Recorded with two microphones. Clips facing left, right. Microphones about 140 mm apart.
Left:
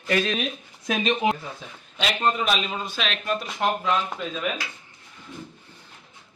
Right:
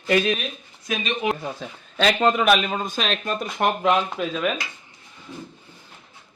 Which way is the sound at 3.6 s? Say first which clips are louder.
Right 5 dB; 70° right (ahead or behind).